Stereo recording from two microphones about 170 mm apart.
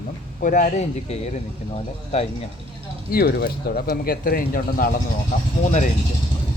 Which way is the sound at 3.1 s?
65° left (ahead or behind).